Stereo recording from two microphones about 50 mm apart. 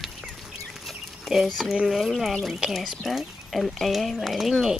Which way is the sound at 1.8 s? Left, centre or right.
Centre.